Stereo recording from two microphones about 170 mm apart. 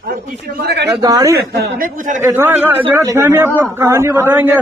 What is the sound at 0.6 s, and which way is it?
Speech, 75° right (ahead or behind).